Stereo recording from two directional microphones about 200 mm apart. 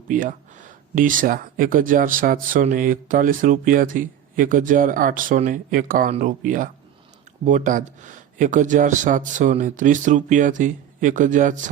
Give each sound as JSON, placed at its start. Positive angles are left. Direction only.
{"t": 0.1, "sound": "speech", "side_deg": -40}